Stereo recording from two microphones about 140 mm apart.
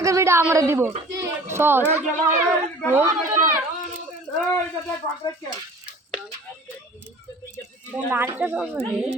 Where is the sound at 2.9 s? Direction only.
20° right (ahead or behind).